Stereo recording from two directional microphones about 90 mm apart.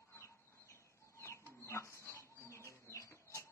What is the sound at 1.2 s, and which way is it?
Bird, 30° left (ahead or behind).